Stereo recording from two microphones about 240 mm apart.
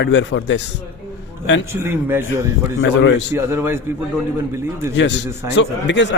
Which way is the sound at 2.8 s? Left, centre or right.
Left.